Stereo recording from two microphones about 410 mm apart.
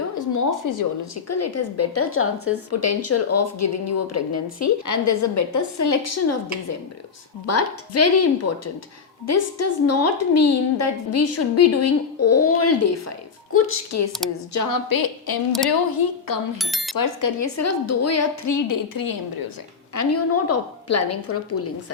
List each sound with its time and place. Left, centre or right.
0.2 s speech: left
7.4 s speech: left
14.5 s a woman's voice: left
16.6 s speech: centre
16.9 s a woman's voice: left
19.9 s speech: left